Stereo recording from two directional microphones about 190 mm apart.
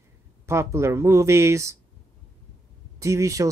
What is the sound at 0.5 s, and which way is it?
Speech, 15° right (ahead or behind).